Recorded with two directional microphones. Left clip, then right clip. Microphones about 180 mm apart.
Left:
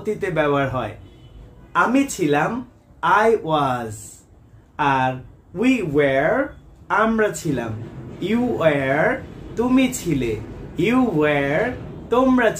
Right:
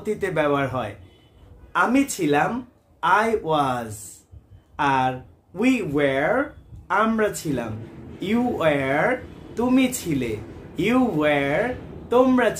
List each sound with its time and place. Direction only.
0.0 s speech: 25° right (ahead or behind)